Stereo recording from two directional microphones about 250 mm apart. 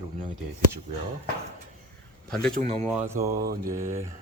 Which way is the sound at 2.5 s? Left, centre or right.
Right.